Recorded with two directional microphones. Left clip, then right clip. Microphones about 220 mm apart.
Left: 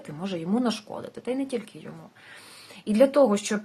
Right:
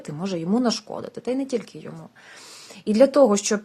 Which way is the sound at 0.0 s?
35° right (ahead or behind).